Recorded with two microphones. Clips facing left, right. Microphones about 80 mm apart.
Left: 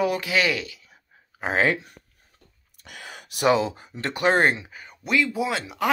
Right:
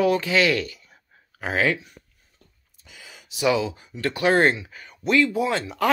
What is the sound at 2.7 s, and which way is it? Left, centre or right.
Sigh, left.